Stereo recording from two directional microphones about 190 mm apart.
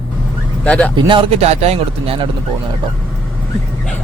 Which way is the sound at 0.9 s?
25° right (ahead or behind).